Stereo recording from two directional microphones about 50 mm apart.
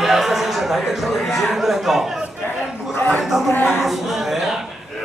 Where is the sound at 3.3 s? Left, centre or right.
Centre.